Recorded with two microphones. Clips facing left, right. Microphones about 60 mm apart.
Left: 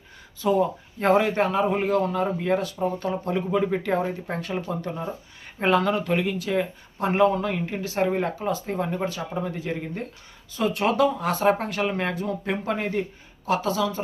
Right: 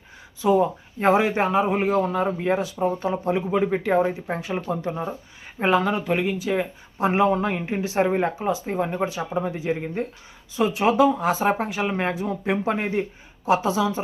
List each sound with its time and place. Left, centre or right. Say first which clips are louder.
0.4 s a man's voice: right 3 dB; centre
7.3 s a man's voice: right 2 dB; right